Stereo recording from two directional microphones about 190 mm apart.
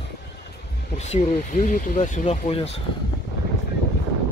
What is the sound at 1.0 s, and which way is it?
Speech, 40° left (ahead or behind).